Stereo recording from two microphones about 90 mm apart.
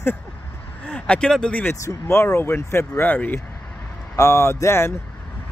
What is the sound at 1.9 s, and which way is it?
Speech, 30° left (ahead or behind).